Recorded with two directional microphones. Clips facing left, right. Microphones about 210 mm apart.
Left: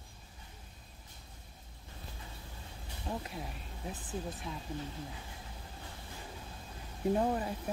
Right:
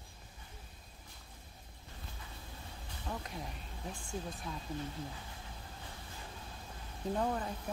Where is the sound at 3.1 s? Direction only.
25° left (ahead or behind).